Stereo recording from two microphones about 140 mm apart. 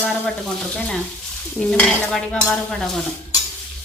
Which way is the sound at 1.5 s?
5° left (ahead or behind).